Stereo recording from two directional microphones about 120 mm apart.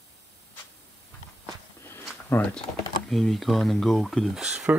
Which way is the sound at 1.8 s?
20° left (ahead or behind).